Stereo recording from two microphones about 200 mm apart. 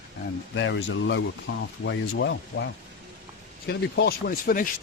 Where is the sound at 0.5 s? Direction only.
70° left (ahead or behind).